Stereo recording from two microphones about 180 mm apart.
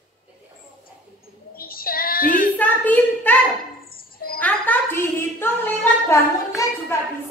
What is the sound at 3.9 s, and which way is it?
Bird, 55° left (ahead or behind).